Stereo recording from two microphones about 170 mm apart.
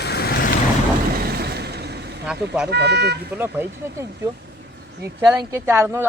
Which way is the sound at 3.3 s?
10° right (ahead or behind).